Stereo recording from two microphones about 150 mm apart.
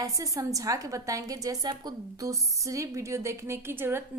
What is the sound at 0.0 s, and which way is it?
A woman's voice, 20° right (ahead or behind).